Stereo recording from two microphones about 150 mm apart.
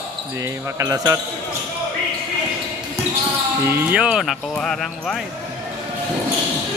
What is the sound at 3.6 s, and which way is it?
Speech, 10° right (ahead or behind).